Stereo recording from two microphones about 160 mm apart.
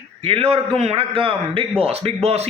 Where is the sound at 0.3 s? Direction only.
40° right (ahead or behind).